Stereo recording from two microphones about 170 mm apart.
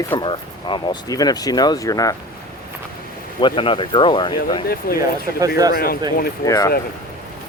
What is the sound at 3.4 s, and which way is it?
Speech, 30° left (ahead or behind).